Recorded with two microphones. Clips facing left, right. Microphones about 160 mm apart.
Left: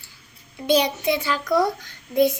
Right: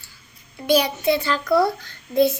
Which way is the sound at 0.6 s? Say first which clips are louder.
Right 1 dB; 20° left (ahead or behind).